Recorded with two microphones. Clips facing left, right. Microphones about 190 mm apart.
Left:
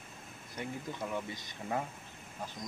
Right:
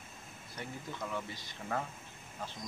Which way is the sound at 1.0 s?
20° left (ahead or behind).